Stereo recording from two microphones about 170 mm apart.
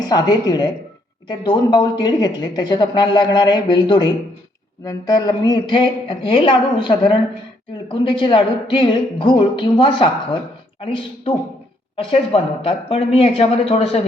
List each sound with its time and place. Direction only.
0.1 s a woman's voice: 25° left (ahead or behind)